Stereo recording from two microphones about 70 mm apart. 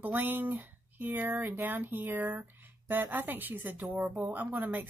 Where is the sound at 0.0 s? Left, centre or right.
Right.